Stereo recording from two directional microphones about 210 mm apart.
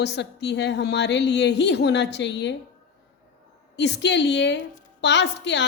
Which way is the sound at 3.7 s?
55° left (ahead or behind).